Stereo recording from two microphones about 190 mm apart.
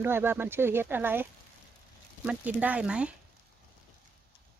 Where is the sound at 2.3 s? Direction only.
5° right (ahead or behind).